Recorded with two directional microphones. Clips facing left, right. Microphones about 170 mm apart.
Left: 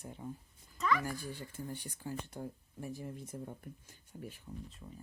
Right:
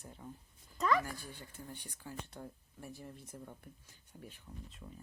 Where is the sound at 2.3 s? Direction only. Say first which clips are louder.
Left 5 dB; 15° left (ahead or behind).